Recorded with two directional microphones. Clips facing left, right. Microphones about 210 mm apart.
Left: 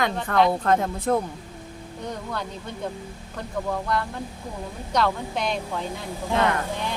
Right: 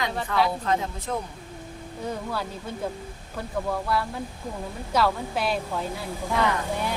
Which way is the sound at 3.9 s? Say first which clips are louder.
Even; 5° right (ahead or behind).